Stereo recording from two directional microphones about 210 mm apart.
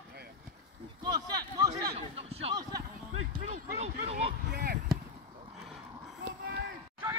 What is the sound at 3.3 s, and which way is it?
Speech, 35° right (ahead or behind).